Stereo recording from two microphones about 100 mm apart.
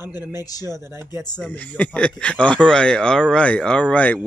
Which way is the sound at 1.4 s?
10° left (ahead or behind).